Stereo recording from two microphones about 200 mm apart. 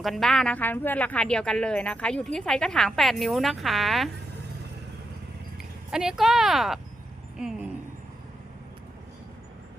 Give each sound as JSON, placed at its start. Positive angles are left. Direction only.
{"t": 0.0, "sound": "a woman's voice", "side_deg": 0}
{"t": 5.9, "sound": "a woman's voice", "side_deg": -5}